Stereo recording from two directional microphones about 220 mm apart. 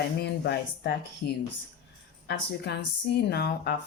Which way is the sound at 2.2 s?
50° left (ahead or behind).